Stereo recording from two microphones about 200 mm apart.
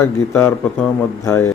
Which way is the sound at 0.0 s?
10° left (ahead or behind).